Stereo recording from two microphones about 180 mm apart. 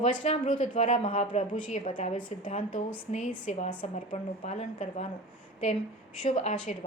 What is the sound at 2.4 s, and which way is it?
Speech, 45° left (ahead or behind).